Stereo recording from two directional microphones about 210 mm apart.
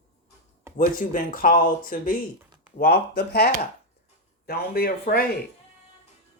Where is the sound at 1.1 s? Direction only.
40° left (ahead or behind).